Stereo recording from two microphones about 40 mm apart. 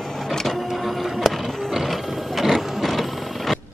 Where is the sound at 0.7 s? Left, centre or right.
Centre.